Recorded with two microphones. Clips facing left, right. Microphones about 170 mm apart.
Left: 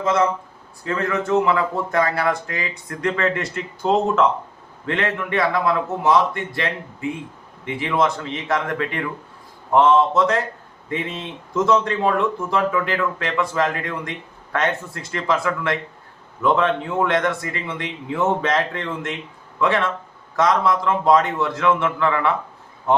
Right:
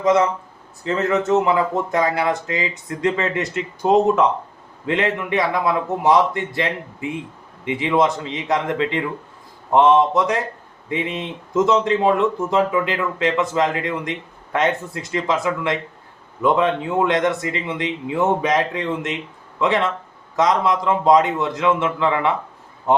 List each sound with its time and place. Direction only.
0.9 s speech: 20° right (ahead or behind)